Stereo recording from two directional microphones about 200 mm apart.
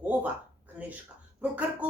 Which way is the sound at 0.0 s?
10° right (ahead or behind).